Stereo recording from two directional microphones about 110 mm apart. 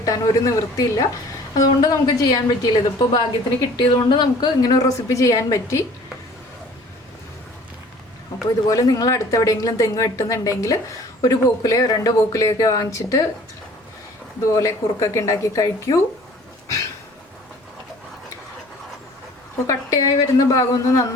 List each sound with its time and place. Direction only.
0.0 s a woman's voice: 30° left (ahead or behind)
8.6 s a woman's voice: 35° left (ahead or behind)
14.5 s a woman's voice: 30° left (ahead or behind)
19.6 s a woman's voice: 30° left (ahead or behind)